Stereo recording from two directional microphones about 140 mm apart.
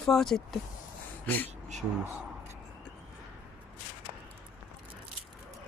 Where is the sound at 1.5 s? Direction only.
55° right (ahead or behind).